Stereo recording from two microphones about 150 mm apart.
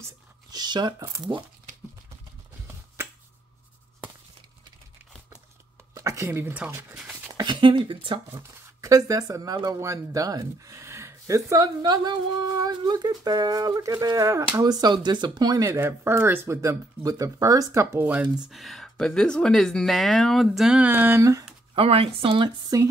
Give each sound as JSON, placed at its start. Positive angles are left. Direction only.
{"t": 0.5, "sound": "speech", "side_deg": -25}
{"t": 5.9, "sound": "speech", "side_deg": -20}
{"t": 7.3, "sound": "speech", "side_deg": -30}
{"t": 8.3, "sound": "speech", "side_deg": -20}
{"t": 21.7, "sound": "speech", "side_deg": -40}
{"t": 22.7, "sound": "speech", "side_deg": -25}